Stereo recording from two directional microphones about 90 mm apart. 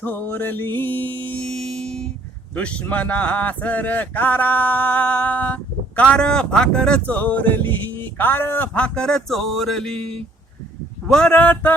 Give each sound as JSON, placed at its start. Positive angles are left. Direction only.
{"t": 0.0, "sound": "mantra", "side_deg": 25}
{"t": 1.4, "sound": "music", "side_deg": 5}
{"t": 2.6, "sound": "speech", "side_deg": 15}
{"t": 11.3, "sound": "mantra", "side_deg": 20}